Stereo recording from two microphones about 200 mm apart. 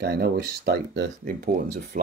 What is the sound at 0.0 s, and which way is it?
Speech, 50° right (ahead or behind).